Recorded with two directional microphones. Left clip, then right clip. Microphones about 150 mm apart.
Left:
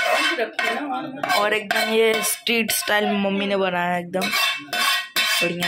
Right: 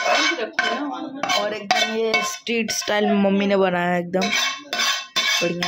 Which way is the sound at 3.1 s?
45° right (ahead or behind).